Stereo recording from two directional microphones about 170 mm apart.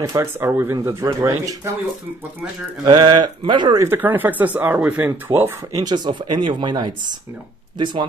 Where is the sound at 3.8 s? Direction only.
10° right (ahead or behind).